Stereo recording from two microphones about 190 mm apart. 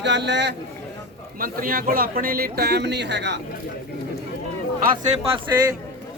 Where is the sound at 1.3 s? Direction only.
50° right (ahead or behind); by 3.4 s 65° right (ahead or behind).